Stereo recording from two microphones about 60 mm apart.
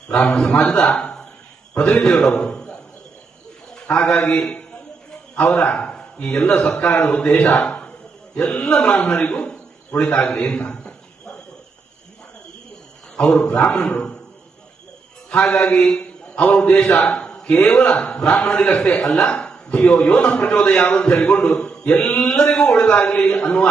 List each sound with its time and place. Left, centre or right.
0.1 s a man's voice: centre
2.4 s a sound: centre
3.8 s a man's voice: centre
5.4 s a man's voice: centre
10.4 s a sound: centre
13.1 s a man's voice: left
15.3 s a man's voice: centre
22.2 s a man's voice: centre